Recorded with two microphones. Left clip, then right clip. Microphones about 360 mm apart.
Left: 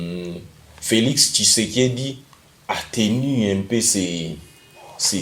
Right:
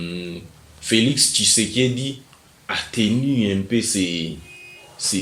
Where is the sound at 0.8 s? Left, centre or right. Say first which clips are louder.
Even; centre.